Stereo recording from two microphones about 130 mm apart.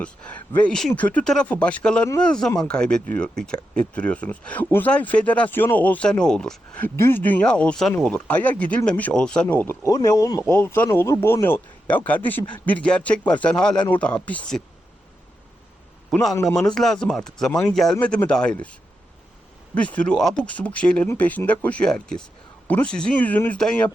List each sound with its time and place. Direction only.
0.0 s speech: 10° left (ahead or behind)
9.8 s speech: 25° left (ahead or behind)
16.3 s speech: 20° left (ahead or behind)
16.6 s speech: 5° left (ahead or behind)